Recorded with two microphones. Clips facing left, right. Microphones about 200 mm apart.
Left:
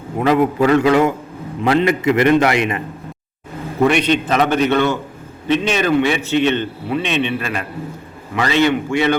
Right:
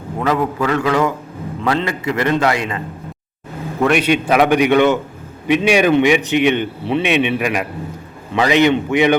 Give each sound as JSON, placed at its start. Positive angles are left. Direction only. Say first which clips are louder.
{"t": 0.2, "sound": "a man's voice", "louder": "left 4 dB", "side_deg": 25}
{"t": 3.8, "sound": "a man's voice", "louder": "right 1 dB", "side_deg": -5}